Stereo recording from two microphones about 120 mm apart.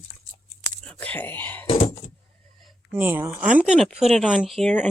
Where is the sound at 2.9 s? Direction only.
15° right (ahead or behind).